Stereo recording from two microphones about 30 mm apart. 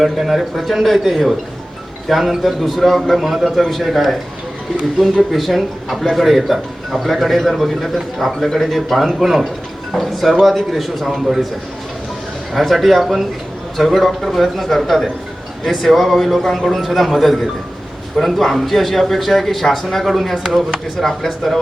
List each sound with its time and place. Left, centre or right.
0.0 s a man's voice: centre
3.6 s a man's voice: centre
3.8 s speech: centre
5.3 s a man's voice: centre
8.4 s a man's voice: centre
8.7 s a man's voice: centre
12.5 s a man's voice: centre
20.3 s speech: centre
21.0 s a man's voice: centre